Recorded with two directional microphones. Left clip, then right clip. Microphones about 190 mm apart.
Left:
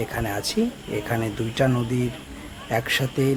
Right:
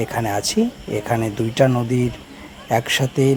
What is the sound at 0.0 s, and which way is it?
Speech, 25° right (ahead or behind).